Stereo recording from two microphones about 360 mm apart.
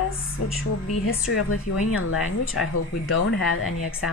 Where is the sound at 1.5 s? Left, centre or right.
Left.